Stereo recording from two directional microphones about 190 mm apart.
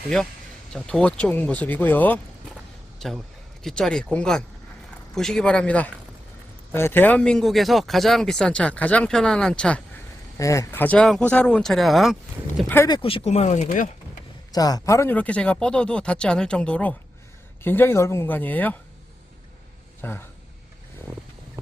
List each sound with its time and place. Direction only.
0.7 s speech: 5° left (ahead or behind)
3.6 s speech: 5° left (ahead or behind)
10.3 s speech: 15° left (ahead or behind); by 12.1 s centre (ahead or behind)
12.6 s speech: 15° left (ahead or behind)
13.0 s speech: 30° left (ahead or behind)
14.5 s speech: 20° left (ahead or behind)
20.0 s speech: 10° left (ahead or behind)